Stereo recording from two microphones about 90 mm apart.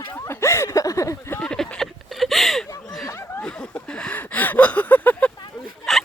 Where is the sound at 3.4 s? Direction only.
10° left (ahead or behind).